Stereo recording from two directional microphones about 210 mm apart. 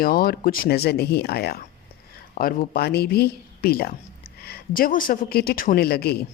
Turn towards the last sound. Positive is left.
turn(degrees=50)  # may be behind; listen again after turning